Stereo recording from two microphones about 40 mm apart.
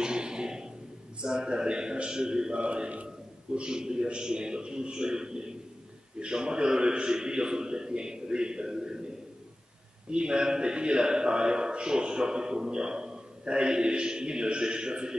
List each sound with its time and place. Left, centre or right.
0.0 s a sound: centre
1.2 s speech: centre
2.6 s a man's voice: right
3.5 s speech: centre
10.1 s speech: right